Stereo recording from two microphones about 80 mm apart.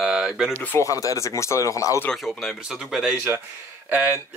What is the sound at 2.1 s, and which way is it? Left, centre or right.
Speech, centre.